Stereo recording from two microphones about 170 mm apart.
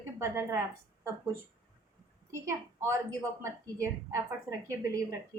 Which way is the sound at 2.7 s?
15° right (ahead or behind).